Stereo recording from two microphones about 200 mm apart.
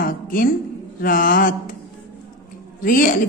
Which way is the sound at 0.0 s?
45° left (ahead or behind).